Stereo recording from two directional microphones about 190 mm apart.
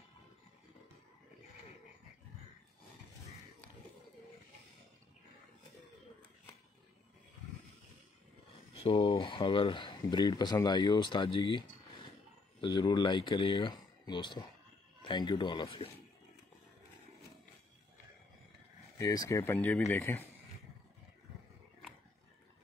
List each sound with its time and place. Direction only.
8.8 s speech: 25° left (ahead or behind)
18.9 s speech: 20° left (ahead or behind)